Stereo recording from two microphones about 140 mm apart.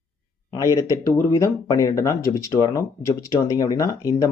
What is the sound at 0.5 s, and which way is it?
Speech, 25° left (ahead or behind).